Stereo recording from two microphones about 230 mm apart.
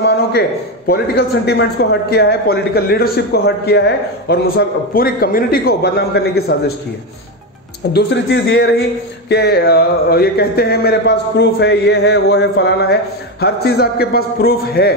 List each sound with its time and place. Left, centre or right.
0.0 s a man's voice: left
7.9 s a man's voice: left